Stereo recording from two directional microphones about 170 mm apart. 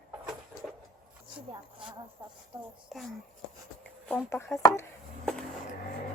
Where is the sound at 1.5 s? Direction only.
25° right (ahead or behind).